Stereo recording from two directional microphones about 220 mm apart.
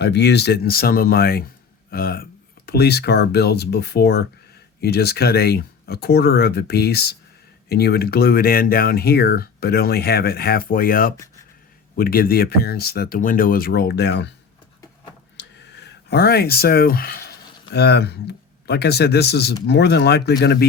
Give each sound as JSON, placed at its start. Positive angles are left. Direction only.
{"t": 0.0, "sound": "speech", "side_deg": 50}
{"t": 15.4, "sound": "speech", "side_deg": 50}